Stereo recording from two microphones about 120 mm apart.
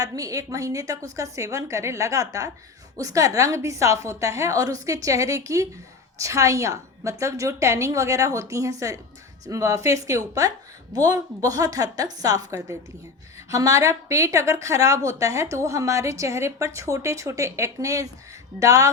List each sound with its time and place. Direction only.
0.0 s a woman's voice: 30° right (ahead or behind)